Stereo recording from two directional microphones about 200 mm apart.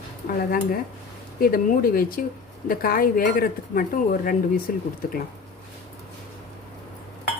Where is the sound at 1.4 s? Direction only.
45° left (ahead or behind).